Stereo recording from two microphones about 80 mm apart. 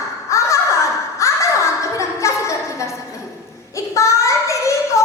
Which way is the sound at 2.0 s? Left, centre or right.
Left.